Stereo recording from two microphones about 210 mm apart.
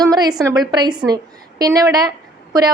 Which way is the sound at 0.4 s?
20° right (ahead or behind).